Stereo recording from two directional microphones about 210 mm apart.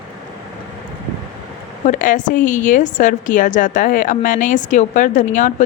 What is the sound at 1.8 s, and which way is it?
Speech, 40° left (ahead or behind).